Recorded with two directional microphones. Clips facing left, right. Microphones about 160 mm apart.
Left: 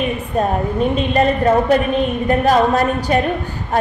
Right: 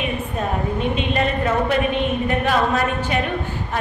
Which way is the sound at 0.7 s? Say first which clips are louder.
Left 7 dB; 40° left (ahead or behind).